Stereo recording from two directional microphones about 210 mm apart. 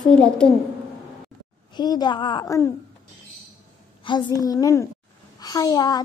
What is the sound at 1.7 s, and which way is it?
A woman's voice, 20° left (ahead or behind).